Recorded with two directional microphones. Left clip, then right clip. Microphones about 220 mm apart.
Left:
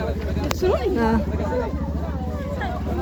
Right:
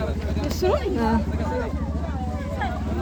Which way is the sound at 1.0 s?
10° left (ahead or behind).